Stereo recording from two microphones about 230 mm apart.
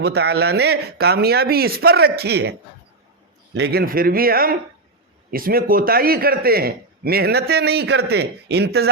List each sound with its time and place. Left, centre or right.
0.0 s a man's voice: right